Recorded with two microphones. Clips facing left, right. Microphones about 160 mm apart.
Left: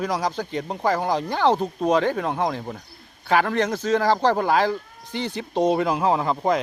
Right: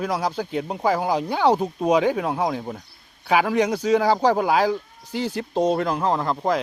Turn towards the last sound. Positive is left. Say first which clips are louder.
# left 1 dB
turn(degrees=0)  # may be behind; listen again after turning